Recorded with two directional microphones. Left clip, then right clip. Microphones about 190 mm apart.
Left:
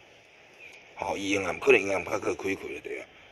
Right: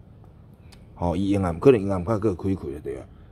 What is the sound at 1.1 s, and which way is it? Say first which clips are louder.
Speech: right 2 dB; 20° right (ahead or behind).